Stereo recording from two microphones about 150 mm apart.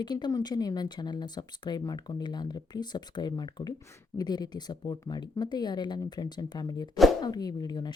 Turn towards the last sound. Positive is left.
turn(degrees=30)  # may be behind; listen again after turning